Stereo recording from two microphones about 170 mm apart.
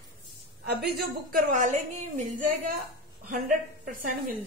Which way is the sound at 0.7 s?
65° right (ahead or behind).